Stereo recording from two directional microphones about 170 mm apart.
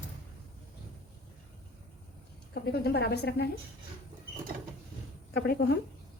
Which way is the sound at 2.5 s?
70° left (ahead or behind).